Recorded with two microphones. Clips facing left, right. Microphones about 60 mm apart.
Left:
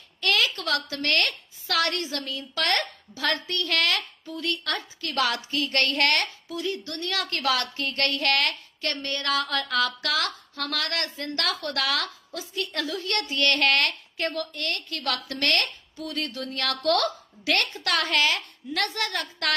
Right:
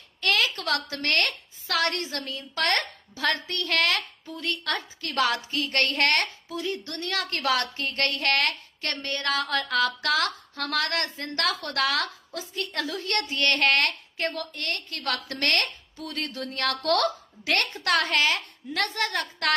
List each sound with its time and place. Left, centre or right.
0.2 s a sound: right
1.0 s a woman's voice: right
14.3 s a woman's voice: centre
14.6 s a woman's voice: right